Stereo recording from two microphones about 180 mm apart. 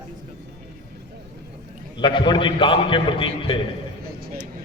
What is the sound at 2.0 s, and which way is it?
A man's voice, 25° left (ahead or behind).